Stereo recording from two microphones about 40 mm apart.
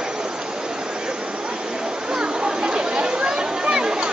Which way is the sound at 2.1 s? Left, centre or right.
Centre.